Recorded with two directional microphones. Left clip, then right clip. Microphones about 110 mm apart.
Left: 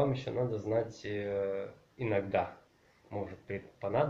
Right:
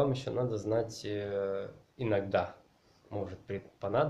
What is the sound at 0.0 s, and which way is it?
Speech, 30° right (ahead or behind).